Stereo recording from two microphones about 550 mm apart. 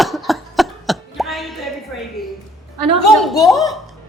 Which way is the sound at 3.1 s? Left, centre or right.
Centre.